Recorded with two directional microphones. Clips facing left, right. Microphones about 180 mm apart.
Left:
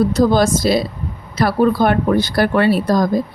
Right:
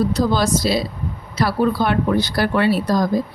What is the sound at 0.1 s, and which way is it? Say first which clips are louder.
Speech: left 4 dB; 50° left (ahead or behind).